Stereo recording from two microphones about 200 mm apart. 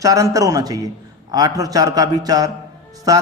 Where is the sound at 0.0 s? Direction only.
15° right (ahead or behind).